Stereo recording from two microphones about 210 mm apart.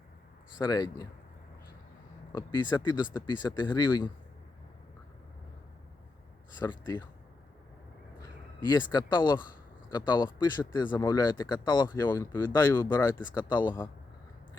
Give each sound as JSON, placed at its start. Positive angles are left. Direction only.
{"t": 0.6, "sound": "speech", "side_deg": 15}
{"t": 2.3, "sound": "speech", "side_deg": 20}
{"t": 6.6, "sound": "speech", "side_deg": 20}
{"t": 8.2, "sound": "speech", "side_deg": 20}